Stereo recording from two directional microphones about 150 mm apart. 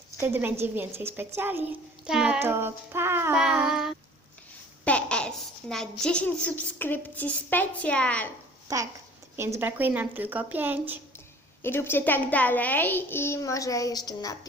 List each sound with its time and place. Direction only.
0.2 s a woman's voice: 15° right (ahead or behind)
3.4 s a sound: 5° right (ahead or behind)
4.9 s a woman's voice: 10° left (ahead or behind)
8.6 s a woman's voice: 20° right (ahead or behind)
11.6 s a child's voice: 15° left (ahead or behind)